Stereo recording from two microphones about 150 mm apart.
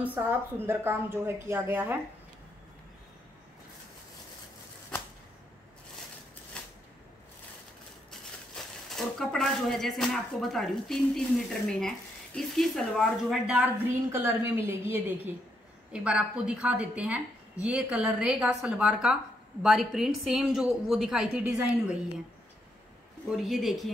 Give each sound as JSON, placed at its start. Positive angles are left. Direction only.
{"t": 0.0, "sound": "a woman's voice", "side_deg": -10}
{"t": 8.8, "sound": "speech", "side_deg": 0}
{"t": 14.1, "sound": "a woman's voice", "side_deg": -20}
{"t": 23.3, "sound": "speech", "side_deg": 0}